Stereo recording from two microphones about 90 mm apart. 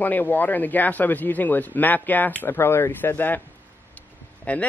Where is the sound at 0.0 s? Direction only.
20° left (ahead or behind).